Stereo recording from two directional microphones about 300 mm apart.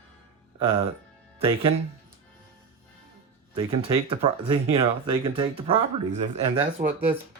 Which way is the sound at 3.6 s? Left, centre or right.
Centre.